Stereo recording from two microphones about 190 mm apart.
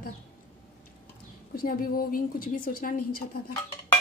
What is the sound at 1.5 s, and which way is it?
A woman's voice, 50° left (ahead or behind).